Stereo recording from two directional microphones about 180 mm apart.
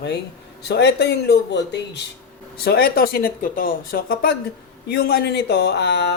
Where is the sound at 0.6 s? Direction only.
70° left (ahead or behind).